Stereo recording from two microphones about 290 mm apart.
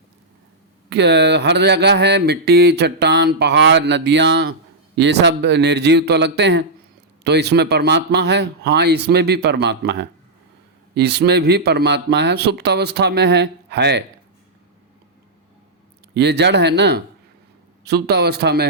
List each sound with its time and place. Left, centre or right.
0.9 s mantra: right
16.1 s mantra: right